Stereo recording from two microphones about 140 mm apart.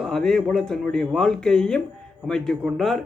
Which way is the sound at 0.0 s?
5° left (ahead or behind).